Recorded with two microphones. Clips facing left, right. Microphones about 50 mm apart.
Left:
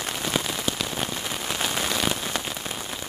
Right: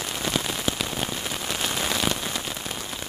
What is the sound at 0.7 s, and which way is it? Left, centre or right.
Rain on surface, centre.